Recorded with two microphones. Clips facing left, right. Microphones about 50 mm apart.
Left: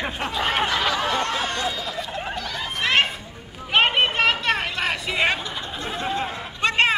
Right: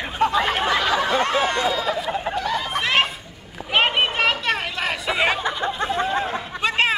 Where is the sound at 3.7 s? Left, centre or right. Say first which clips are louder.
Even; centre.